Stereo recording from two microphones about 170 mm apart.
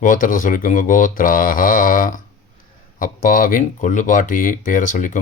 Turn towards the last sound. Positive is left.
turn(degrees=50)  # may be behind; listen again after turning